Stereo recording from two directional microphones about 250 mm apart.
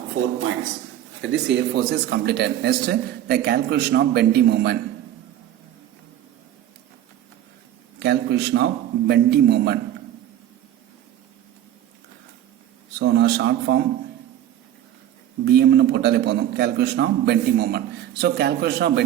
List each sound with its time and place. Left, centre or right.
1.2 s a man's voice: right
7.9 s a man's voice: right
13.0 s a man's voice: right
15.4 s a man's voice: right